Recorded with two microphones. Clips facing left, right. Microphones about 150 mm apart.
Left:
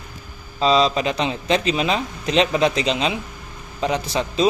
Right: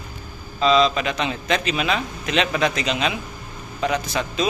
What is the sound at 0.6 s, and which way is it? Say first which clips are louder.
A man's voice: even; 35° left (ahead or behind).